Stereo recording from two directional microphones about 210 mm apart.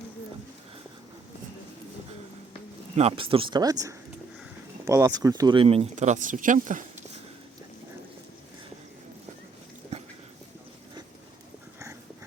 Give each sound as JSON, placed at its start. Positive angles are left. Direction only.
{"t": 2.9, "sound": "speech", "side_deg": -30}